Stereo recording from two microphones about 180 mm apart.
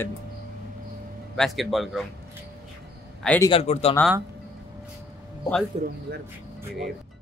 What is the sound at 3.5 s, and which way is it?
Speech, 35° left (ahead or behind).